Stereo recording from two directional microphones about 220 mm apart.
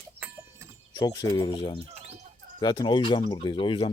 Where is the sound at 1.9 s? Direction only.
30° right (ahead or behind).